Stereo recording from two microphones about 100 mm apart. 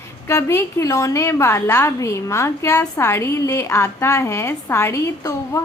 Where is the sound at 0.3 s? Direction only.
30° left (ahead or behind).